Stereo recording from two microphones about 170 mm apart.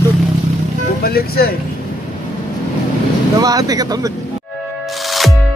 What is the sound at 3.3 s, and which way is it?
Speech, 20° right (ahead or behind).